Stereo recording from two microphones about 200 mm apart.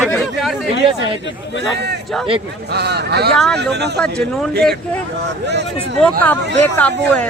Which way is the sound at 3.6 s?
55° right (ahead or behind).